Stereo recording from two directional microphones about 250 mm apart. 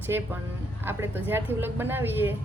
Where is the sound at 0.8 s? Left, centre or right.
Centre.